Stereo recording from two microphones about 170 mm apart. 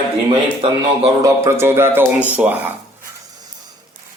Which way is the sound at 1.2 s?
15° right (ahead or behind).